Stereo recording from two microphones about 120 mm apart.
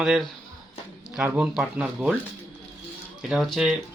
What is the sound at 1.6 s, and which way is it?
Speech, 5° right (ahead or behind).